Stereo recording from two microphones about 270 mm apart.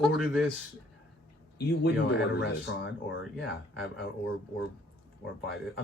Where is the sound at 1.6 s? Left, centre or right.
Left.